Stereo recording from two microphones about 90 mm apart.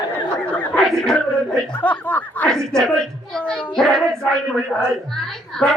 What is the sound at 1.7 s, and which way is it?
Speech, 20° left (ahead or behind).